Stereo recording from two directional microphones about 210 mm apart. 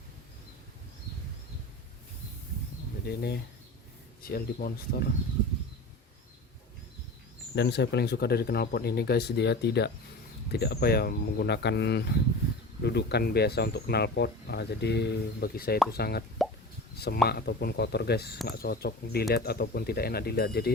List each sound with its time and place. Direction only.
3.1 s speech: 50° left (ahead or behind)
7.5 s speech: 55° left (ahead or behind)
17.2 s speech: 50° left (ahead or behind)